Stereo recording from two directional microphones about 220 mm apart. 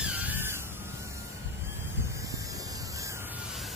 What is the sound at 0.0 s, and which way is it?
Music, 5° right (ahead or behind).